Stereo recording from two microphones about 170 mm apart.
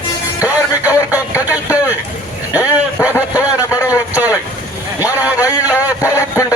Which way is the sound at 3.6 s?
20° left (ahead or behind).